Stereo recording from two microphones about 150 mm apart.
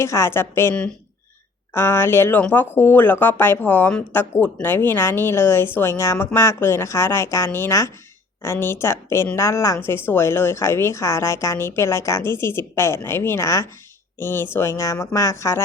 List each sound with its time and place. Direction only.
0.0 s speech: 15° left (ahead or behind)